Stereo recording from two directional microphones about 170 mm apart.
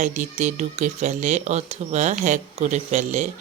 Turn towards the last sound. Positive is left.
turn(degrees=-40)  # may be behind; listen again after turning